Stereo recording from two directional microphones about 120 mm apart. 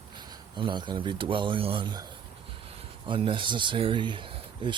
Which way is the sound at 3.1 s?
45° right (ahead or behind).